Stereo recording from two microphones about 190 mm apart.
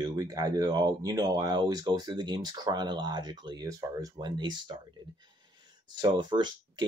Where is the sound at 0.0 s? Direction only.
20° right (ahead or behind).